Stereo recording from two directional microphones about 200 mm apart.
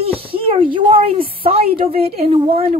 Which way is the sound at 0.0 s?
30° right (ahead or behind).